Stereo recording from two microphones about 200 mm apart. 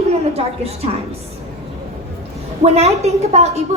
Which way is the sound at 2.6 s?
30° right (ahead or behind).